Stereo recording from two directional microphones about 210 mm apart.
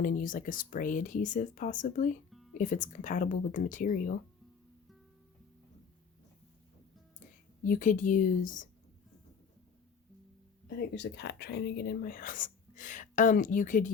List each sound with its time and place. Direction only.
0.0 s speech: 40° left (ahead or behind)
7.6 s speech: 40° left (ahead or behind)
10.8 s speech: 50° left (ahead or behind)